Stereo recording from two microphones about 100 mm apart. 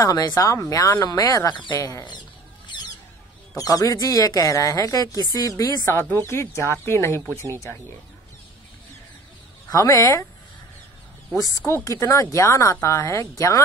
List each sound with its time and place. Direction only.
0.0 s a woman's voice: 40° left (ahead or behind)
3.5 s a woman's voice: 35° left (ahead or behind)
6.0 s speech: 25° left (ahead or behind)
9.7 s a woman's voice: 35° left (ahead or behind)
11.3 s a woman's voice: 35° left (ahead or behind)